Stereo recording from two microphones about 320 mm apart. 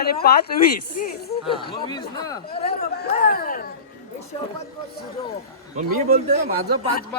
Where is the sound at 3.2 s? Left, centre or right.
Left.